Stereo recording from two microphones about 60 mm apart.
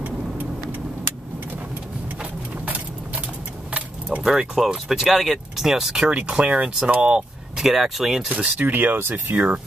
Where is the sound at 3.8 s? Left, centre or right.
Right.